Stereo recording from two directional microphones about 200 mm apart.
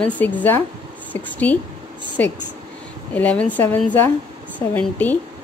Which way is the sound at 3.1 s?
5° left (ahead or behind).